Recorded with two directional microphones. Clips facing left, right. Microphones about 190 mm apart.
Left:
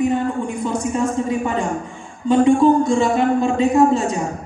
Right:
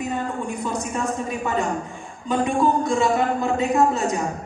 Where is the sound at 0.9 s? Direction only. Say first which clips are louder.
Left 6 dB; 25° left (ahead or behind).